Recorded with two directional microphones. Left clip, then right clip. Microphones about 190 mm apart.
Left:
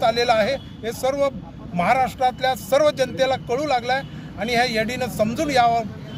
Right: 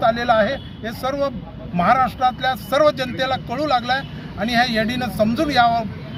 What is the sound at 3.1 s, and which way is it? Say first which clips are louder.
Speech: left 1 dB; 10° left (ahead or behind).